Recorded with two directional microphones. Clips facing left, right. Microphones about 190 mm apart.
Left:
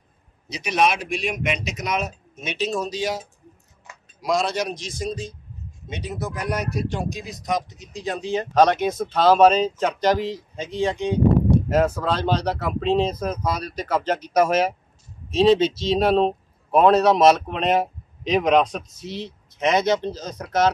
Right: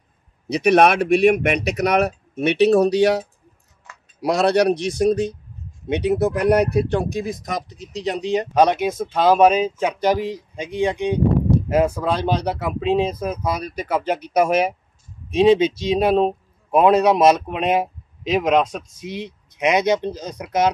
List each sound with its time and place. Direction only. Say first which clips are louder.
0.5 s speech: right 7 dB; 60° right (ahead or behind)
8.1 s speech: right 3 dB; 15° right (ahead or behind)